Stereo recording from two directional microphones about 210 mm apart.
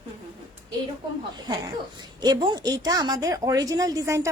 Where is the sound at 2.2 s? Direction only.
20° right (ahead or behind).